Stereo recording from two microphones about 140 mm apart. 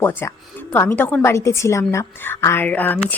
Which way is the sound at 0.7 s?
15° left (ahead or behind).